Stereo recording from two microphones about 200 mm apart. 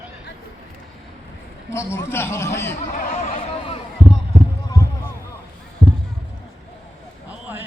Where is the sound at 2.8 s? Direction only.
40° left (ahead or behind).